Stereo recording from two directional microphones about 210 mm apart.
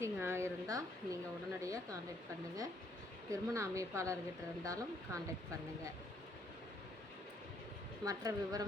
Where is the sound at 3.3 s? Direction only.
15° right (ahead or behind).